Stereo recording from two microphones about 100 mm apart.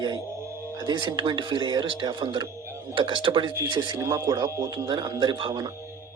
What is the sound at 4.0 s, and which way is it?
Speech, 35° right (ahead or behind).